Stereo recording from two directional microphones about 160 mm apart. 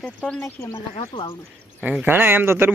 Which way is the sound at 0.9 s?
30° left (ahead or behind).